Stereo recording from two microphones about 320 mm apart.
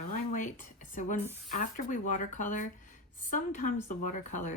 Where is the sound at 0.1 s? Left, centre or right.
Left.